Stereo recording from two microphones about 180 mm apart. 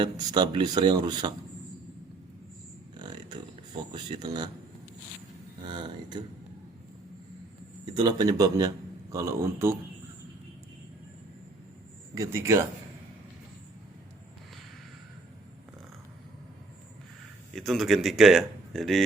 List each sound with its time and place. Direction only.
0.0 s speech: 25° right (ahead or behind)
3.0 s a sound: 25° right (ahead or behind)
3.9 s speech: 25° right (ahead or behind)
5.6 s speech: 25° right (ahead or behind)
7.9 s speech: 25° right (ahead or behind)
12.1 s a man's voice: 15° right (ahead or behind)
17.5 s speech: centre (ahead or behind)